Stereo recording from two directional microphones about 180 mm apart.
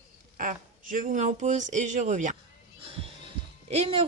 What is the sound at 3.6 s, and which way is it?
Speech, 35° right (ahead or behind).